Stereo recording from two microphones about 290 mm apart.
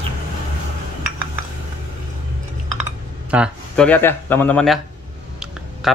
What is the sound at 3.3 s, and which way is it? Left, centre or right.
Speech, centre.